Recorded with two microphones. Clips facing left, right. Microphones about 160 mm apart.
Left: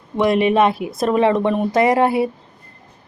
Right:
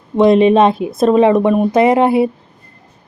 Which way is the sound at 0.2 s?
25° right (ahead or behind).